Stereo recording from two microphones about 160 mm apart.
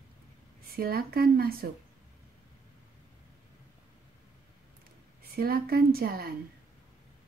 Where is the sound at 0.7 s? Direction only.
70° right (ahead or behind).